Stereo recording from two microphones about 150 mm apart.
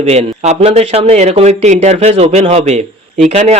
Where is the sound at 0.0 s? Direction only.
45° right (ahead or behind).